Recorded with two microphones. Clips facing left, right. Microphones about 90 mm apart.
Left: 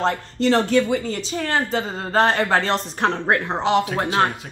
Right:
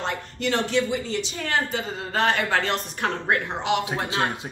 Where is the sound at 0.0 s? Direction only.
35° left (ahead or behind).